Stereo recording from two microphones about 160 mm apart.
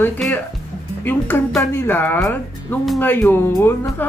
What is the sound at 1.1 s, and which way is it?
Music, 15° left (ahead or behind).